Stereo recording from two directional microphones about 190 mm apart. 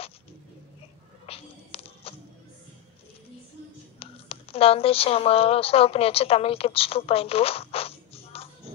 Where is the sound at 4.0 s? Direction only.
30° left (ahead or behind).